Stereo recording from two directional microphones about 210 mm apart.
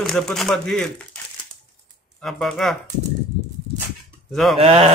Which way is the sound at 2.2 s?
Centre (ahead or behind).